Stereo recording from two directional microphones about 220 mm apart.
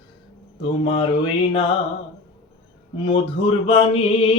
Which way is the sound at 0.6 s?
25° left (ahead or behind).